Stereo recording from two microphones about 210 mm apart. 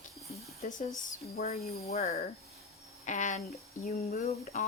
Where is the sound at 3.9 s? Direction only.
45° left (ahead or behind).